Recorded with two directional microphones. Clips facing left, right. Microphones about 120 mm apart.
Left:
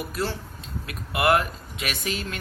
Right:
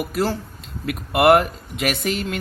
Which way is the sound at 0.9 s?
65° right (ahead or behind).